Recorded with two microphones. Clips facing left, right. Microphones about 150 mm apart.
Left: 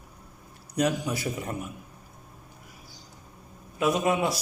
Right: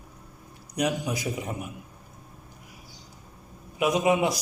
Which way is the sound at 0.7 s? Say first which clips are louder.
Left 1 dB; 15° right (ahead or behind).